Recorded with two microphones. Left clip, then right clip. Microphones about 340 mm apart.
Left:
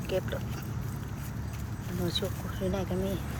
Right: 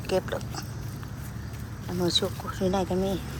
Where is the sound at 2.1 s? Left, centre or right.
Centre.